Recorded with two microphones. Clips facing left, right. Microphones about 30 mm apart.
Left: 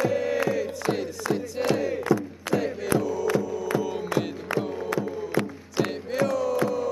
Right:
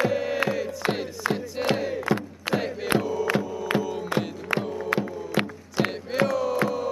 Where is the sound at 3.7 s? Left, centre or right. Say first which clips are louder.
Right 1 dB; right.